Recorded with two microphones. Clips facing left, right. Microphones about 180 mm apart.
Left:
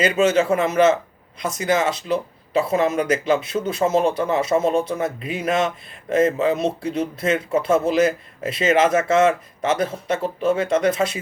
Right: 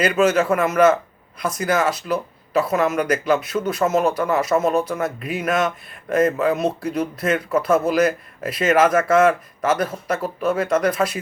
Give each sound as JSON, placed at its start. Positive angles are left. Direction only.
{"t": 0.1, "sound": "speech", "side_deg": 25}